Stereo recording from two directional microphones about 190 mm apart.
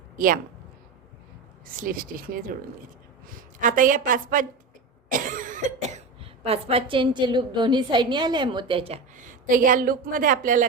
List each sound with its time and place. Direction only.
1.6 s a woman's voice: 50° right (ahead or behind)
5.0 s cough: 45° right (ahead or behind)
6.1 s a woman's voice: 30° right (ahead or behind)